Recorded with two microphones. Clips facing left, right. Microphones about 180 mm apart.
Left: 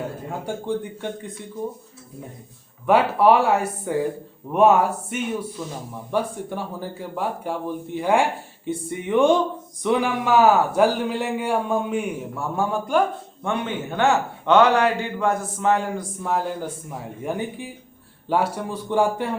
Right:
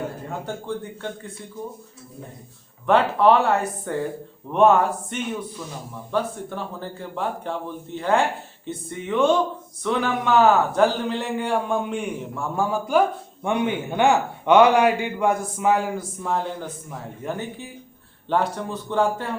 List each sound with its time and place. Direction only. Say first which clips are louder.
0.5 s speech: left 6 dB; 10° left (ahead or behind)
2.8 s speech: left 1 dB; 10° left (ahead or behind)
13.4 s a man's voice: right 3 dB; 15° right (ahead or behind); by 19.3 s 15° left (ahead or behind)